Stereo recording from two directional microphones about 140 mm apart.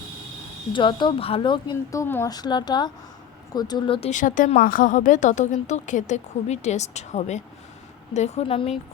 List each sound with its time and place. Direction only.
0.7 s speech: 35° left (ahead or behind)
1.9 s speech: 20° left (ahead or behind)
2.3 s speech: 30° left (ahead or behind)
4.1 s a woman's voice: 65° left (ahead or behind); by 8.8 s 45° left (ahead or behind)